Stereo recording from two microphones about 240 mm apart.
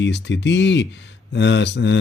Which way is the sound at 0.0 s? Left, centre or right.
Left.